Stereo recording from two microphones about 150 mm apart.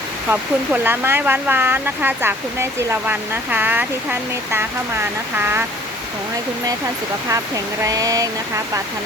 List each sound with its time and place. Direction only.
0.3 s speech: 10° right (ahead or behind)
7.3 s speech: 20° right (ahead or behind)